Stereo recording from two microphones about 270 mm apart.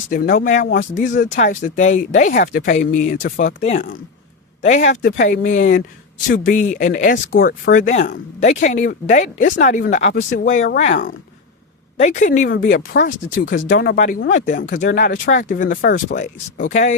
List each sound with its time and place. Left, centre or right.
0.1 s speech: left